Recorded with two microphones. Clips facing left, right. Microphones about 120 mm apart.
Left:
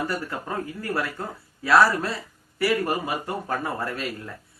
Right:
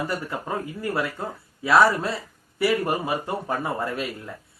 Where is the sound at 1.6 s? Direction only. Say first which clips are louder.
Right 1 dB; 20° right (ahead or behind).